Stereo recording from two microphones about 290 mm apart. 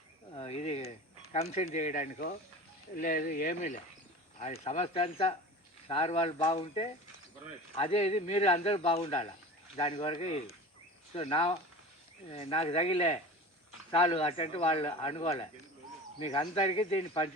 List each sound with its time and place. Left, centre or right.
0.3 s a sound: left
3.1 s speech: left
4.4 s speech: left